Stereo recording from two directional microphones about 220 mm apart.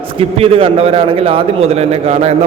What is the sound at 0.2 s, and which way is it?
A man's voice, 25° right (ahead or behind).